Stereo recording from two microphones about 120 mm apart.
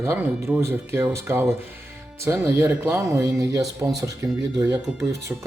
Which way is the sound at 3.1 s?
30° right (ahead or behind).